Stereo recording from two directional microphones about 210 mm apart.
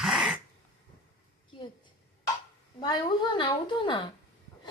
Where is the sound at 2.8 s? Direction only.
20° left (ahead or behind).